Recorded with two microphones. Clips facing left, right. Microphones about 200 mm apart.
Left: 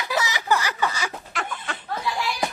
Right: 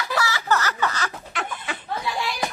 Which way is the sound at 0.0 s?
20° left (ahead or behind).